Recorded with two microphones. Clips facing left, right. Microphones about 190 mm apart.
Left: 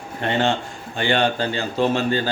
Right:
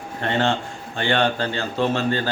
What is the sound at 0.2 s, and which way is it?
A man's voice, 15° left (ahead or behind).